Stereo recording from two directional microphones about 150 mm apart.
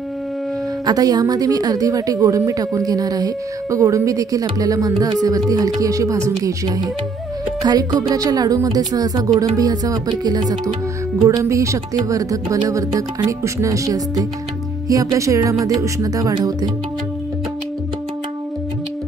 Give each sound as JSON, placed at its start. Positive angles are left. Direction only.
{"t": 0.8, "sound": "a woman's voice", "side_deg": -25}